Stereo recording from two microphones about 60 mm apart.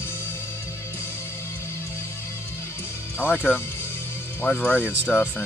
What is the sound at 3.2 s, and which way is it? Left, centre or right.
Speech, left.